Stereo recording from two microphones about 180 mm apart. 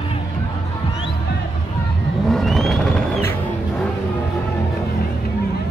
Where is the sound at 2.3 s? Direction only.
Centre (ahead or behind).